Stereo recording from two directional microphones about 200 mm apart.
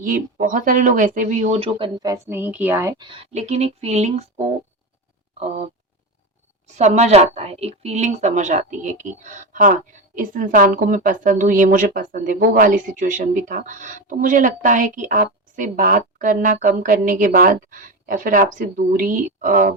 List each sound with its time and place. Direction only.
0.0 s speech: 40° right (ahead or behind); by 3.2 s 20° right (ahead or behind)
3.3 s speech: 35° right (ahead or behind)
6.7 s speech: 35° right (ahead or behind)